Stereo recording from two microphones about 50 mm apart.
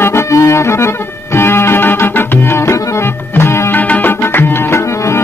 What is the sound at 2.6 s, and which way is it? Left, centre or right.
Music, left.